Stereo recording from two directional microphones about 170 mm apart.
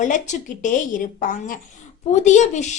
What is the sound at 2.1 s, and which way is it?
Speech, 45° left (ahead or behind).